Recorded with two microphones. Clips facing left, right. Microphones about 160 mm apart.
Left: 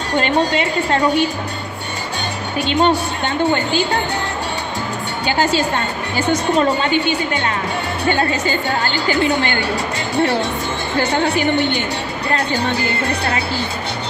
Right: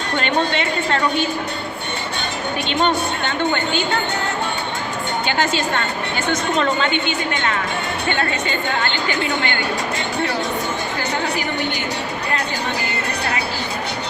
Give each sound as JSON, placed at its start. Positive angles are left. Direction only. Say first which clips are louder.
{"t": 0.1, "sound": "a woman's voice", "louder": "left 4 dB", "side_deg": 35}
{"t": 2.8, "sound": "a woman's voice", "louder": "left 2 dB", "side_deg": 35}
{"t": 5.2, "sound": "a woman's voice", "louder": "left 5 dB", "side_deg": 35}
{"t": 8.2, "sound": "a woman's voice", "louder": "left 3 dB", "side_deg": 35}
{"t": 10.9, "sound": "a woman's voice", "louder": "left 9 dB", "side_deg": 30}